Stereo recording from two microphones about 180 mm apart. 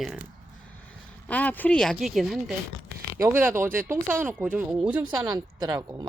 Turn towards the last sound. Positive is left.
turn(degrees=-20)  # may be behind; listen again after turning